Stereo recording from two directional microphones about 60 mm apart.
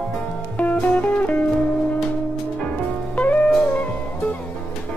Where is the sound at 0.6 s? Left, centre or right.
Left.